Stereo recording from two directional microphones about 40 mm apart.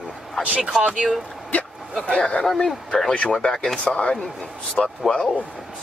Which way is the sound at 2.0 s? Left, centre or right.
Left.